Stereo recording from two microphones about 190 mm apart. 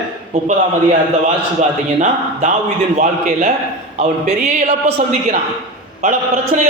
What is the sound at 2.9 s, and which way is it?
Speech, 40° right (ahead or behind).